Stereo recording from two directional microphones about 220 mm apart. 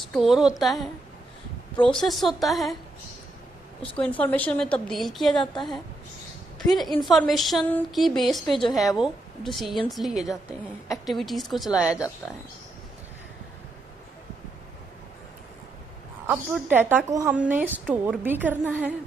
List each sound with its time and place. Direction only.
0.1 s a woman's voice: centre (ahead or behind)
3.8 s a woman's voice: 5° left (ahead or behind)
16.3 s a woman's voice: 5° right (ahead or behind)